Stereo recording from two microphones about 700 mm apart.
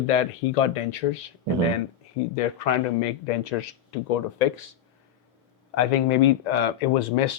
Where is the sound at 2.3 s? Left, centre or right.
Left.